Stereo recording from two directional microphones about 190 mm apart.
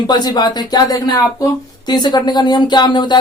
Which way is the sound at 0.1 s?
20° left (ahead or behind).